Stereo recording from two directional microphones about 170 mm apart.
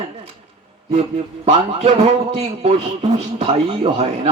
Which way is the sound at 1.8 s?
40° right (ahead or behind).